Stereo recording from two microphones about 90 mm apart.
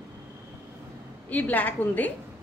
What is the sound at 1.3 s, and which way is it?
Speech, 20° left (ahead or behind).